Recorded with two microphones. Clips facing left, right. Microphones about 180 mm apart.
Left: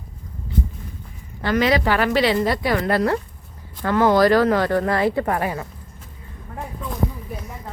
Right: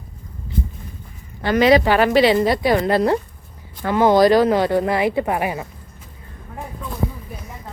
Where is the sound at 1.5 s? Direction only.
20° right (ahead or behind).